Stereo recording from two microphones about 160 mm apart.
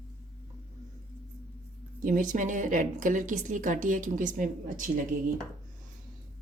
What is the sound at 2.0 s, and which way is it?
A woman's voice, 55° right (ahead or behind).